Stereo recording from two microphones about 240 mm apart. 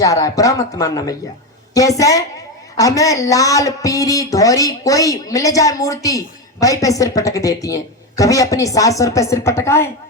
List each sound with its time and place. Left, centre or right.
0.0 s speech: centre